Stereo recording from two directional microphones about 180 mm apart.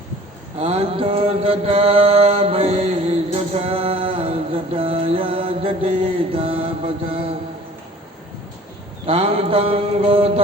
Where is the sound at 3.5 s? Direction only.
30° right (ahead or behind).